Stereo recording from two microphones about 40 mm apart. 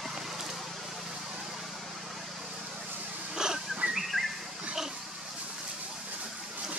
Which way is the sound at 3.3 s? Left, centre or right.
Centre.